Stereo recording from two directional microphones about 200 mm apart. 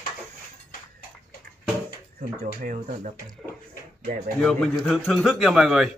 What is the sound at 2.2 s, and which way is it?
Speech, 40° right (ahead or behind).